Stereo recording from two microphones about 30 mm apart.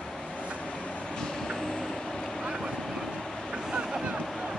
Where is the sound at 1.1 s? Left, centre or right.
Left.